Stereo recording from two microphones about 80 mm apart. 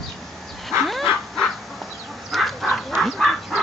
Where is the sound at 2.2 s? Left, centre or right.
Centre.